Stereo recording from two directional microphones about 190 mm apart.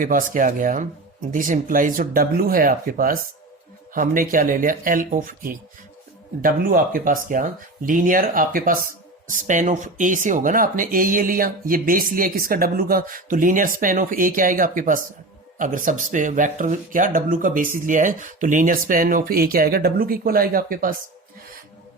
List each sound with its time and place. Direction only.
0.0 s speech: 45° right (ahead or behind)